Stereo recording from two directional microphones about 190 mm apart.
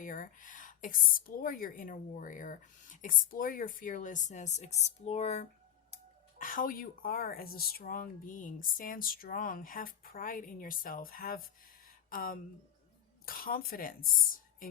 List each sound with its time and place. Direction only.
0.0 s speech: 45° left (ahead or behind)
6.4 s speech: 45° left (ahead or behind)